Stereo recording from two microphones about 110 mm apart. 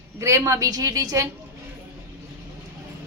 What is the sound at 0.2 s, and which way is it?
A woman's voice, 25° right (ahead or behind).